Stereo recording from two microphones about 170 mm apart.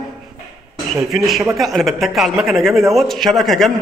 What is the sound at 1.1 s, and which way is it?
A man's voice, centre (ahead or behind).